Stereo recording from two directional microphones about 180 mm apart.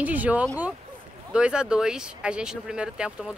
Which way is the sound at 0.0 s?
10° right (ahead or behind).